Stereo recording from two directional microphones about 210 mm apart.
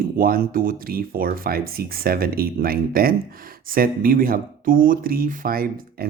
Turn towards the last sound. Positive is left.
turn(degrees=-45)  # may be behind; listen again after turning